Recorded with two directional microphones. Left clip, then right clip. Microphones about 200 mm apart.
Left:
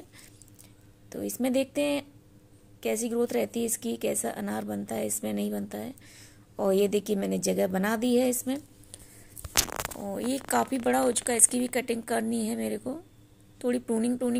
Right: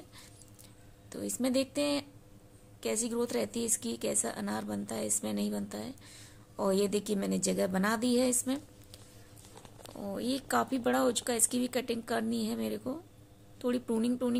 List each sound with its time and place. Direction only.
1.1 s a woman's voice: 5° left (ahead or behind)
9.9 s speech: 5° right (ahead or behind)